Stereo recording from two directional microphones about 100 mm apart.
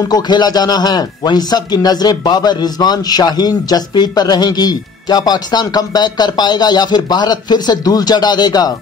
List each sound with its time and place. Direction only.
0.1 s a man's voice: 45° left (ahead or behind)